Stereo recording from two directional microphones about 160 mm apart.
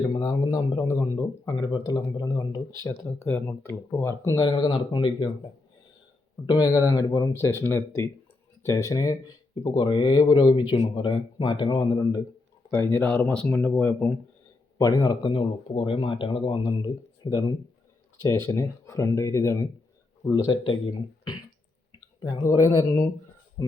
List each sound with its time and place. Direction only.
0.1 s speech: 20° left (ahead or behind)
4.4 s speech: 30° left (ahead or behind)
6.4 s speech: 25° left (ahead or behind)
12.7 s speech: 15° left (ahead or behind)
14.8 s speech: 25° left (ahead or behind)
22.2 s speech: 25° left (ahead or behind)